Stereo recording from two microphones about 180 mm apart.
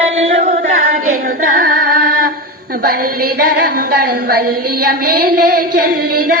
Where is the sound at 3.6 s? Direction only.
60° right (ahead or behind).